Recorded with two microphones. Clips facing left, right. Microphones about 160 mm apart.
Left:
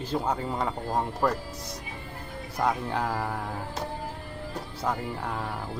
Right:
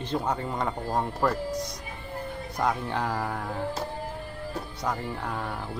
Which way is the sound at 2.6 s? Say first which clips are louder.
Even; centre (ahead or behind).